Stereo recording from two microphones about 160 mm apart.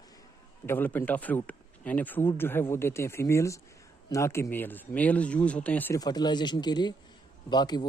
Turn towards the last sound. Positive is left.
turn(degrees=25)  # may be behind; listen again after turning